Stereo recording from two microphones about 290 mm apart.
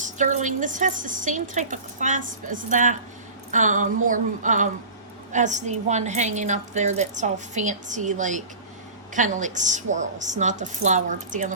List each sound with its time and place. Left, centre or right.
0.0 s a woman's voice: right